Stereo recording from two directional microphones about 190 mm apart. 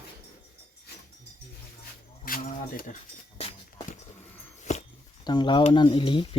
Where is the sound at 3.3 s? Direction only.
30° left (ahead or behind).